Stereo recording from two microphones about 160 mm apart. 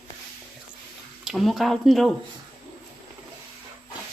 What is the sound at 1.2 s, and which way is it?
Speech, centre (ahead or behind).